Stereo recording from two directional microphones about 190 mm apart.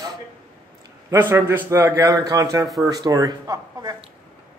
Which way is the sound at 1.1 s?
15° right (ahead or behind).